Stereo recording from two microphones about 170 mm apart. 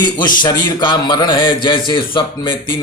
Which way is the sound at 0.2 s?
25° left (ahead or behind).